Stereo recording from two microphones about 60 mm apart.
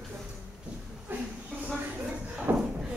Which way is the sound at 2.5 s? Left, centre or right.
Right.